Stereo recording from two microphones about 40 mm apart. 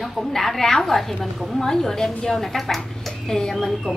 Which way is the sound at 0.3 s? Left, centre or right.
Centre.